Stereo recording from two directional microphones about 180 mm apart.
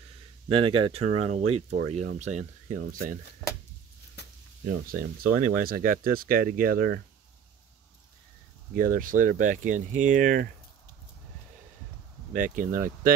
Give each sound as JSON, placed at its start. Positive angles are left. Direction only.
{"t": 0.5, "sound": "speech", "side_deg": -30}
{"t": 4.2, "sound": "a sound", "side_deg": 70}
{"t": 4.6, "sound": "speech", "side_deg": -55}
{"t": 8.7, "sound": "speech", "side_deg": -50}
{"t": 12.3, "sound": "speech", "side_deg": -45}